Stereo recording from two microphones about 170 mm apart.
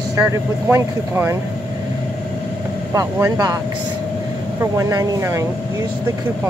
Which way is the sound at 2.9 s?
20° right (ahead or behind).